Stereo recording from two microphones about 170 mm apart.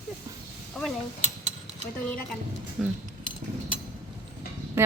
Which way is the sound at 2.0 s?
10° left (ahead or behind).